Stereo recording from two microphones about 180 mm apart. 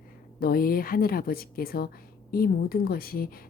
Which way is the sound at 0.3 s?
55° left (ahead or behind).